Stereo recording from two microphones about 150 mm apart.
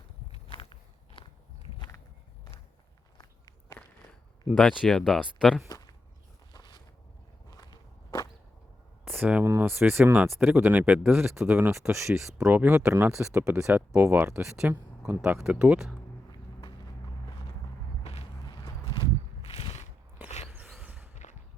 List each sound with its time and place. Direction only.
0.3 s walk: 35° left (ahead or behind)
3.2 s walk: 25° left (ahead or behind)
4.4 s speech: centre (ahead or behind)
5.6 s a sound: 25° left (ahead or behind)
7.5 s walk: 25° left (ahead or behind)
9.0 s speech: 10° right (ahead or behind)
18.0 s a sound: 45° left (ahead or behind)